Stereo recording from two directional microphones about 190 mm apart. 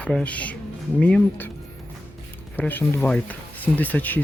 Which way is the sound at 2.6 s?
10° left (ahead or behind).